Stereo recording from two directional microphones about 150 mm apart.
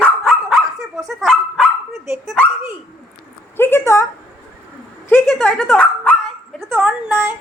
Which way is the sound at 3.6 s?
15° left (ahead or behind).